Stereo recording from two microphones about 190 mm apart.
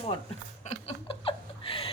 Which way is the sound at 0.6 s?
35° left (ahead or behind).